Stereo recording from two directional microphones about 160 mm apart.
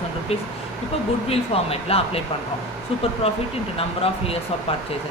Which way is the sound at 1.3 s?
40° left (ahead or behind).